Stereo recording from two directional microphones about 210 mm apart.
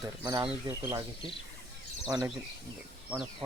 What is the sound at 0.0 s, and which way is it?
Speech, 20° right (ahead or behind).